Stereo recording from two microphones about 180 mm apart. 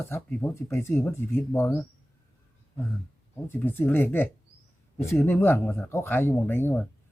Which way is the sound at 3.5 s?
10° left (ahead or behind).